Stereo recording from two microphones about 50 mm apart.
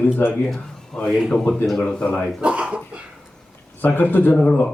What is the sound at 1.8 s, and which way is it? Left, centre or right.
Speech, left.